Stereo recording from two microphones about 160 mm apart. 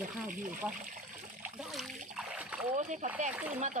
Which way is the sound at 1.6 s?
Centre (ahead or behind).